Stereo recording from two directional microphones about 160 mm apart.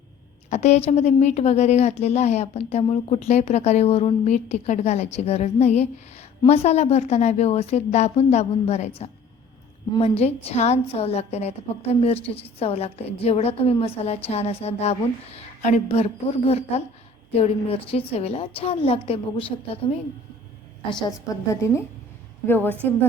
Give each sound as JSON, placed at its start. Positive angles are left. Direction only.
{"t": 0.5, "sound": "a woman's voice", "side_deg": 45}
{"t": 20.9, "sound": "a woman's voice", "side_deg": 20}